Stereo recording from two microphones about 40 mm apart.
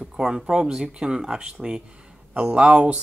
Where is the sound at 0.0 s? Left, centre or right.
Centre.